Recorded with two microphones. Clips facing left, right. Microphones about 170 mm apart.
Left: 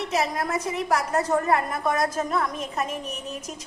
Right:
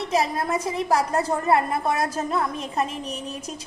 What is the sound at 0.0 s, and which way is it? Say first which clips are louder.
A woman's voice: right 2 dB; 30° right (ahead or behind).